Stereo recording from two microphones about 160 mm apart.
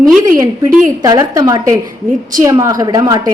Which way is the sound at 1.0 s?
25° right (ahead or behind).